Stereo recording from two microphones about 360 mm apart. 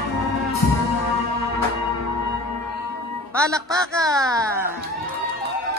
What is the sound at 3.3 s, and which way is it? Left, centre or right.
Music, centre.